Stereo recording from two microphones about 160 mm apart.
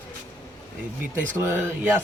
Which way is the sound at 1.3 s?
15° right (ahead or behind).